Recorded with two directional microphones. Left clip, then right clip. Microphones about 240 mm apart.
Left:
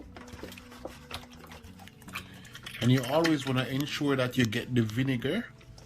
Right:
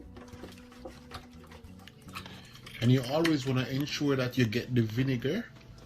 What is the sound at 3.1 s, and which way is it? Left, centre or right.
Speech, centre.